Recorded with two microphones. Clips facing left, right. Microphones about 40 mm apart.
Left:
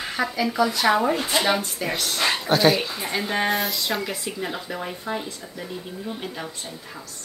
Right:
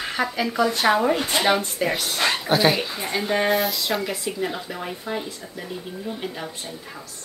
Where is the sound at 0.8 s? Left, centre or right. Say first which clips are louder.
Right 2 dB; centre.